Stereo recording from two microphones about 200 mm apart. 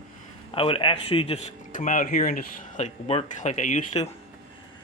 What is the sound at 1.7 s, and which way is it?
Speech, 40° left (ahead or behind).